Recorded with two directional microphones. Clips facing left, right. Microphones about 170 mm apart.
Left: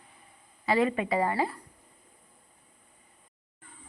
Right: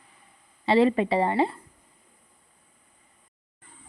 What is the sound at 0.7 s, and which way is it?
Speech, 30° right (ahead or behind).